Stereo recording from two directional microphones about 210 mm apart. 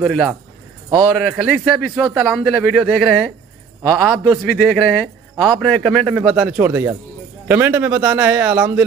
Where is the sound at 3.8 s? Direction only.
20° right (ahead or behind).